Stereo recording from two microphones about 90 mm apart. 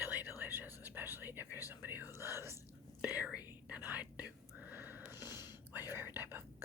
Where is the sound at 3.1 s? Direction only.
15° right (ahead or behind).